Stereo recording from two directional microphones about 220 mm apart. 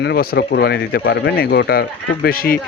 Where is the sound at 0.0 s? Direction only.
45° left (ahead or behind).